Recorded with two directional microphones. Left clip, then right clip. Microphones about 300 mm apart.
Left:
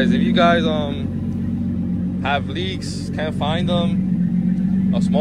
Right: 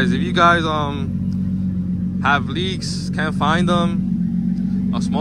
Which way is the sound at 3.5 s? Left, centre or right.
Centre.